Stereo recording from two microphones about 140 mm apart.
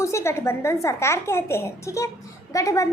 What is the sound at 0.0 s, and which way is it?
A woman's voice, 20° left (ahead or behind).